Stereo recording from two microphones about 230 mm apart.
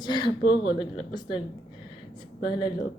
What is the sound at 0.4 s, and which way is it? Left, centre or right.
Speech, left.